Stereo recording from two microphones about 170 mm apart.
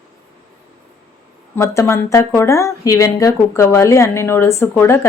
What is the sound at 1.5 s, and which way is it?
Speech, 15° left (ahead or behind).